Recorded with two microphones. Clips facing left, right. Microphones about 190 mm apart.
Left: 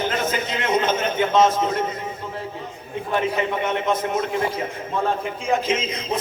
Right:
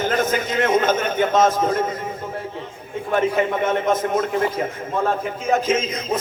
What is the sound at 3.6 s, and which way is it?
Speech, 45° right (ahead or behind).